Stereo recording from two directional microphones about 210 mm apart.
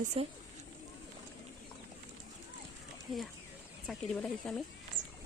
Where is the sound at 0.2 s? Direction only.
25° right (ahead or behind).